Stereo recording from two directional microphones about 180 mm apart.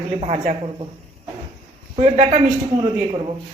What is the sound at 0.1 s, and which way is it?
Speech, 40° right (ahead or behind).